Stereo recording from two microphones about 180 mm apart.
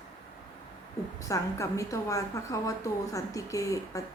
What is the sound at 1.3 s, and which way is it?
A woman's voice, 15° left (ahead or behind).